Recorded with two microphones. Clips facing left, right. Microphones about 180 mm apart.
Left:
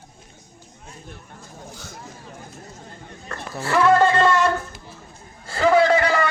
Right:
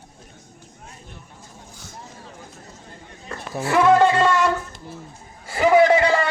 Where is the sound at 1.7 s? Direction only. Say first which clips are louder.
Left 4 dB; 70° left (ahead or behind).